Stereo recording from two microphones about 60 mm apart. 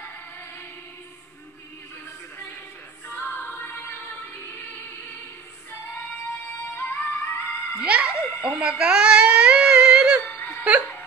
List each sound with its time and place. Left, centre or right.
3.1 s music: left
7.0 s music: left
7.8 s music: centre
8.5 s a sound: centre
10.2 s whimper: left